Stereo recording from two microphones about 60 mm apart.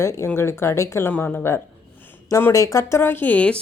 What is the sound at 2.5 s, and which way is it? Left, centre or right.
Speech, left.